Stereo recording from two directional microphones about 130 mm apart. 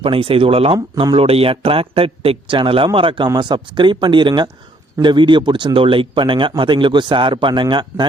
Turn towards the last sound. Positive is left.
turn(degrees=-35)  # may be behind; listen again after turning